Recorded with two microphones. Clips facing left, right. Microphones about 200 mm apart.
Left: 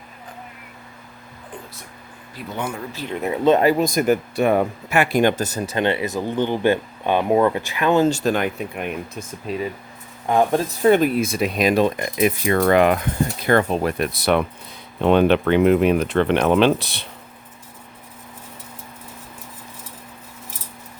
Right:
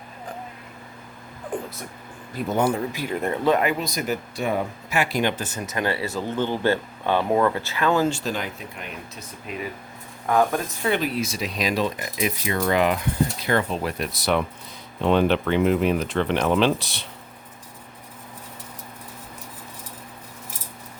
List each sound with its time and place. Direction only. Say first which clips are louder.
1.5 s a sound: right 8 dB; 45° right (ahead or behind)
2.5 s speech: right 6 dB; 40° right (ahead or behind)
2.9 s speech: right 1 dB; 10° right (ahead or behind)
3.2 s speech: left 3 dB; 5° left (ahead or behind)
3.4 s speech: left 6 dB; 30° left (ahead or behind)
3.8 s speech: left 9 dB; 50° left (ahead or behind); by 8.1 s 20° left (ahead or behind)
8.1 s speech: left 8 dB; 55° left (ahead or behind)
9.5 s speech: left 7 dB; 35° left (ahead or behind)
10.2 s speech: left 3 dB; 25° left (ahead or behind)
10.7 s speech: left 9 dB; 45° left (ahead or behind); by 17.1 s 60° left (ahead or behind)